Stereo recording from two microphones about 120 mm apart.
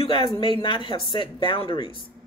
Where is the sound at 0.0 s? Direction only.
45° left (ahead or behind).